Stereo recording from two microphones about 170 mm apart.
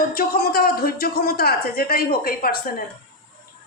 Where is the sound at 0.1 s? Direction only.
60° left (ahead or behind).